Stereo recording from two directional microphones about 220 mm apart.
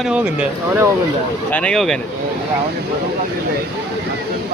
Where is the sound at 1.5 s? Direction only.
5° left (ahead or behind).